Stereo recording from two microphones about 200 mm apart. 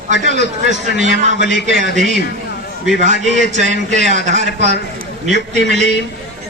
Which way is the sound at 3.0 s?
35° right (ahead or behind).